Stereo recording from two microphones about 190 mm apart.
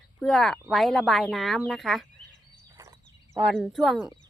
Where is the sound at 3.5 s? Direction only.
Centre (ahead or behind).